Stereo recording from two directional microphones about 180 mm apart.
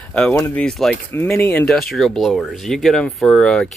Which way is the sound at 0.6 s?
5° left (ahead or behind).